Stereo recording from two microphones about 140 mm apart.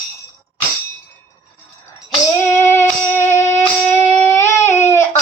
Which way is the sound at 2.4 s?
20° left (ahead or behind).